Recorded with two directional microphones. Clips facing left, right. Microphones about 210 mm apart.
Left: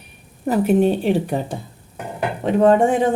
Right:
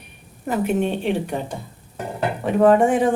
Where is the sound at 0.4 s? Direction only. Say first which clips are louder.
Left 5 dB; 40° left (ahead or behind).